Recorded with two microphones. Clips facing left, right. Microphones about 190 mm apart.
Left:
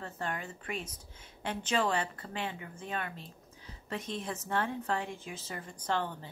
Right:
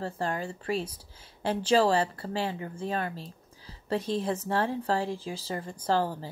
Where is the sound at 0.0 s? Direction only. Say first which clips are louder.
Right 7 dB; 30° right (ahead or behind).